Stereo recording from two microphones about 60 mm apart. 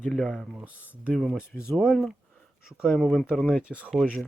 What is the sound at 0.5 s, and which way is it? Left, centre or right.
Speech, right.